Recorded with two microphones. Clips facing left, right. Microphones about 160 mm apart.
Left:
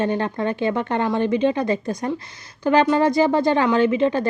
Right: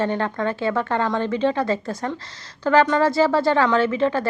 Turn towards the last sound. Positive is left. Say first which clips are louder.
# left 2 dB
turn(degrees=20)  # may be behind; listen again after turning